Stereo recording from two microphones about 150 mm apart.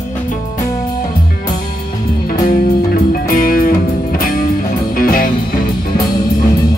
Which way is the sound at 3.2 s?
70° left (ahead or behind).